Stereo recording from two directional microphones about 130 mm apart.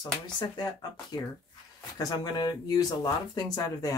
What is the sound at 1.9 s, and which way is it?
Speech, 30° left (ahead or behind).